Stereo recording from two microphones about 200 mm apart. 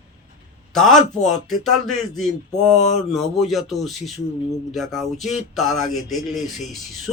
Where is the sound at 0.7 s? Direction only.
Centre (ahead or behind).